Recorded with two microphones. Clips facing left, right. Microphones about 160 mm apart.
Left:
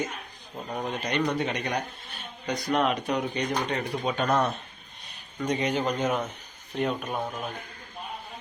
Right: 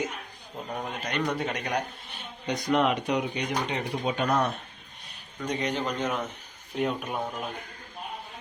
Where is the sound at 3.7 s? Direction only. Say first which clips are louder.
Left 1 dB; 15° right (ahead or behind).